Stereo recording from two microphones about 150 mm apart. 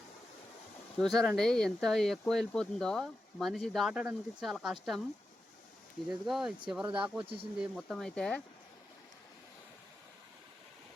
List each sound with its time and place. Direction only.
0.9 s speech: centre (ahead or behind)
6.1 s speech: centre (ahead or behind)
7.2 s speech: 40° right (ahead or behind)
7.8 s speech: 5° left (ahead or behind)